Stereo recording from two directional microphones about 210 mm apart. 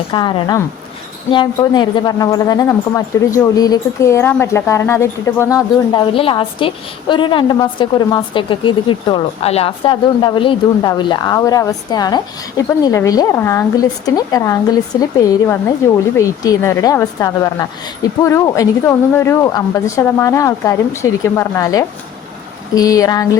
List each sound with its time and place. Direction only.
0.1 s speech: 25° left (ahead or behind)